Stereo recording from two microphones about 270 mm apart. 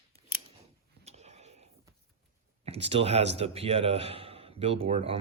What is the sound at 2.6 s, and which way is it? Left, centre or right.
Speech, right.